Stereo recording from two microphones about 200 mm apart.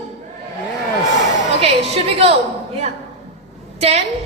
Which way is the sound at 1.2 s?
35° right (ahead or behind).